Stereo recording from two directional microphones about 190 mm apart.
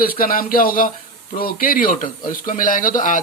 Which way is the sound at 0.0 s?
50° left (ahead or behind).